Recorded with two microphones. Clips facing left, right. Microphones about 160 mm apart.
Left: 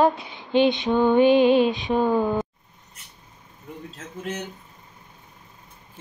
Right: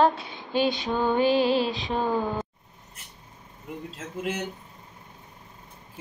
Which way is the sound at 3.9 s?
10° right (ahead or behind).